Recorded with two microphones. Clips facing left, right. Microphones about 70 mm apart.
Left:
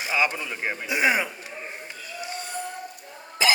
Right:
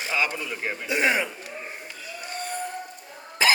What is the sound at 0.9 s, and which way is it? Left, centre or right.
Speech, centre.